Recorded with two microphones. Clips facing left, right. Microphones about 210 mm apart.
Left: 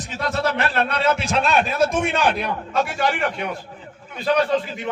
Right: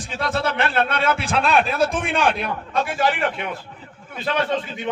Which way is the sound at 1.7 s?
30° right (ahead or behind).